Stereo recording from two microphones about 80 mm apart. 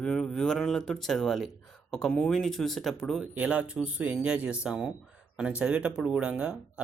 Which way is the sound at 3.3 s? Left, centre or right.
Centre.